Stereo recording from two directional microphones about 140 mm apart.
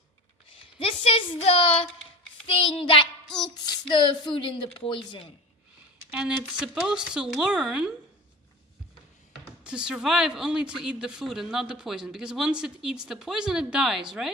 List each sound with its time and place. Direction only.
0.8 s speech: 40° left (ahead or behind)
3.2 s child singing: 5° left (ahead or behind)
3.7 s speech: 35° left (ahead or behind)
6.1 s speech: 5° right (ahead or behind)
9.6 s speech: 5° right (ahead or behind)